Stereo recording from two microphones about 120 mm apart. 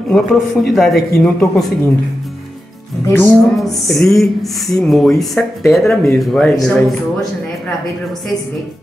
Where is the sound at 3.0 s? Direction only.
20° left (ahead or behind).